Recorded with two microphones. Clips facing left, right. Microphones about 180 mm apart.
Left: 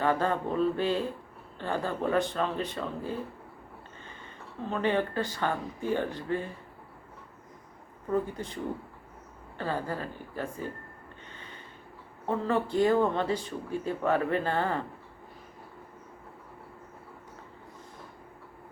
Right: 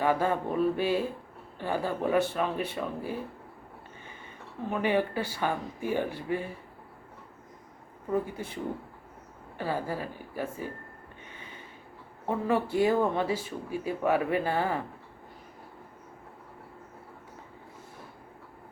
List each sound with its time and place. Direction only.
0.0 s speech: 10° right (ahead or behind)
4.6 s speech: 10° right (ahead or behind)
8.1 s speech: 10° right (ahead or behind)
9.6 s speech: 10° right (ahead or behind)
12.2 s speech: 10° right (ahead or behind)